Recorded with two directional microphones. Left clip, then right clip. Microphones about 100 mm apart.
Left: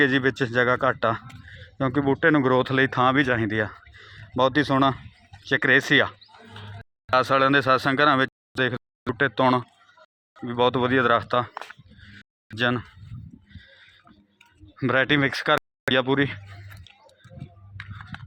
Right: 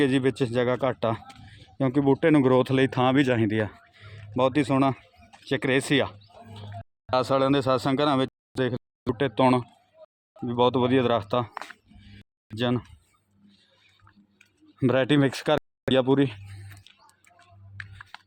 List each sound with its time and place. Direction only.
0.0 s speech: 20° right (ahead or behind)
1.5 s speech: 40° right (ahead or behind)
3.9 s a sound: 25° right (ahead or behind)
4.4 s speech: 10° right (ahead or behind)
5.5 s wild animals: 20° right (ahead or behind)
7.1 s speech: 25° right (ahead or behind); by 11.5 s 50° right (ahead or behind)
11.9 s a sound: 60° right (ahead or behind)
12.5 s speech: 30° right (ahead or behind)
14.8 s speech: 90° right
15.9 s a sound: 75° right (ahead or behind)